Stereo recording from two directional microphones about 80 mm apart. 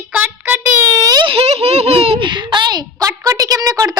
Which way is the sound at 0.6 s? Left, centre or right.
Right.